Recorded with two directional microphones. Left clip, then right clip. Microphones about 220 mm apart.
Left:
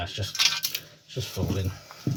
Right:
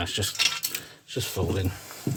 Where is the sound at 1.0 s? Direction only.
50° right (ahead or behind).